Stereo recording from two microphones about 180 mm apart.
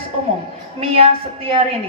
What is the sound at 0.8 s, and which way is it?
Speech, 35° right (ahead or behind).